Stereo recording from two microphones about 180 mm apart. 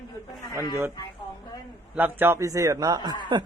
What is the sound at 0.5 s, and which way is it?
Speech, 20° left (ahead or behind).